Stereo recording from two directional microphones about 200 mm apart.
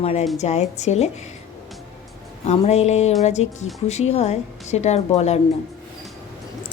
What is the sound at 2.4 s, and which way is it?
A woman's voice, 35° left (ahead or behind).